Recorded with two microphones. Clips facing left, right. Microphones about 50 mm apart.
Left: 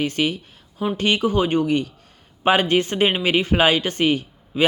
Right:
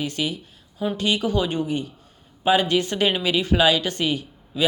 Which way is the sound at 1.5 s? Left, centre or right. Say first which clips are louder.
Left 6 dB; left.